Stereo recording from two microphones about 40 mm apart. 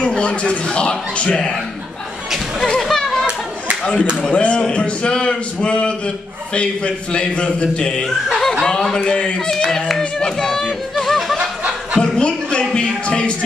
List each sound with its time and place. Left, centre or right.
0.0 s a man's voice: left
2.6 s a sound: centre
3.8 s a man's voice: left
8.6 s a man's voice: centre
9.5 s a sound: centre
9.8 s chatter: centre
11.3 s snicker: right
12.0 s a sound: left
12.7 s a man's voice: left